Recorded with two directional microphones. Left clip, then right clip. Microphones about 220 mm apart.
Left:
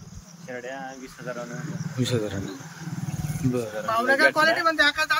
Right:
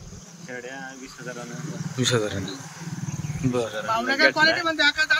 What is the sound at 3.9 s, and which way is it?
Speech, 15° left (ahead or behind).